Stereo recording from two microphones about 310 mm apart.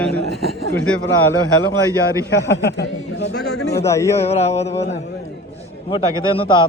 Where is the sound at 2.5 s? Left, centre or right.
Left.